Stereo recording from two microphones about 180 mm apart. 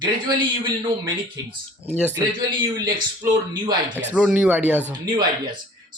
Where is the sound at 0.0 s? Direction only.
25° right (ahead or behind).